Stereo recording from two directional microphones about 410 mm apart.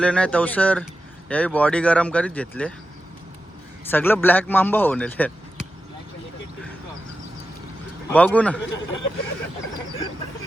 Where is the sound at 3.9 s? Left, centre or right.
Centre.